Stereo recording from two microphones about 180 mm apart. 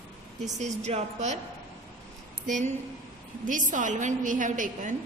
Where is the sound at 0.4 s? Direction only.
40° right (ahead or behind).